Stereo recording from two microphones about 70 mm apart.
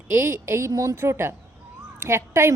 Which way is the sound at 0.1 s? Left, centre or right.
Right.